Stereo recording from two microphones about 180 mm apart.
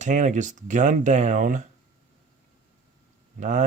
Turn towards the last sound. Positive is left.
turn(degrees=-45)  # may be behind; listen again after turning